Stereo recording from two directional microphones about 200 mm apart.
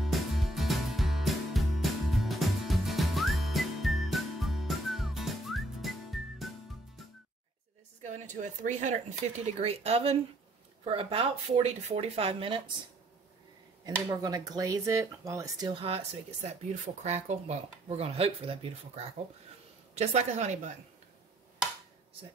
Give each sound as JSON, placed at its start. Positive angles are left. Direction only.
{"t": 0.0, "sound": "music", "side_deg": 0}
{"t": 8.0, "sound": "a woman's voice", "side_deg": -40}
{"t": 14.2, "sound": "a woman's voice", "side_deg": -20}